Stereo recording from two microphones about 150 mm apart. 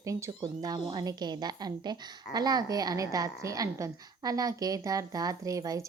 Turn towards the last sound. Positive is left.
turn(degrees=-20)  # may be behind; listen again after turning